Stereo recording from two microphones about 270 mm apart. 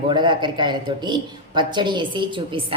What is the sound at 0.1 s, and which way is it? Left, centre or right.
A woman's voice, centre.